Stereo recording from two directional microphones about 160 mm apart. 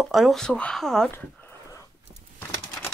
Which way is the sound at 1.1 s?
15° left (ahead or behind).